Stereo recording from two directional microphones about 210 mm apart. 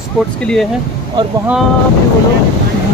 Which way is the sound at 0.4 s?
5° left (ahead or behind).